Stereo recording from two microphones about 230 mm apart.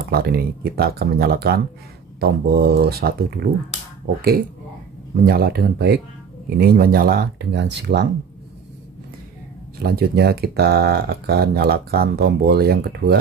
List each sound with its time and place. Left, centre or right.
0.1 s speech: right
5.1 s speech: right
9.8 s speech: right